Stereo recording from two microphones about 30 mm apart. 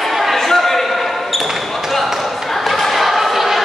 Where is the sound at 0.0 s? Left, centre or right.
Centre.